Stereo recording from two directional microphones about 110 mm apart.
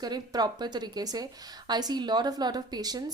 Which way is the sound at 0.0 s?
40° right (ahead or behind).